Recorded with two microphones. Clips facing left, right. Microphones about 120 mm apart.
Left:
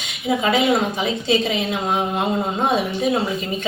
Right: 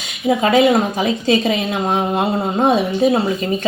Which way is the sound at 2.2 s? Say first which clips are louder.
Right 4 dB; 35° right (ahead or behind).